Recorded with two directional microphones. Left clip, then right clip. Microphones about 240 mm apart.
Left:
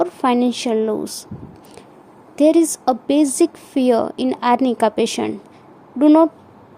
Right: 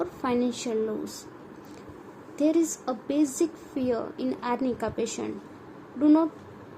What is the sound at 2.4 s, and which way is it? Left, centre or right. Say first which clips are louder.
A woman's voice: left 11 dB; left.